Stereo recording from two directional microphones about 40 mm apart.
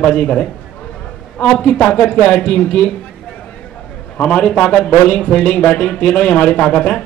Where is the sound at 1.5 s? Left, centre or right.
Left.